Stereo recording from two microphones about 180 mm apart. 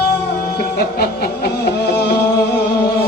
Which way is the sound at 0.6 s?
60° left (ahead or behind).